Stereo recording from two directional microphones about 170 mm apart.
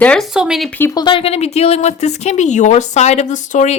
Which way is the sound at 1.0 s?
30° left (ahead or behind).